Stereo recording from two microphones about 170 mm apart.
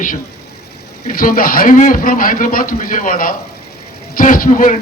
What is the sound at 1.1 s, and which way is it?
A man's voice, 55° left (ahead or behind).